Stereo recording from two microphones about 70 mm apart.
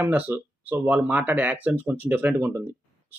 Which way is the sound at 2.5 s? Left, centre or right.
Right.